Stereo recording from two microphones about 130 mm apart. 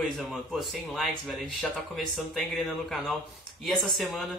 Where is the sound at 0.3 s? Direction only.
Centre (ahead or behind).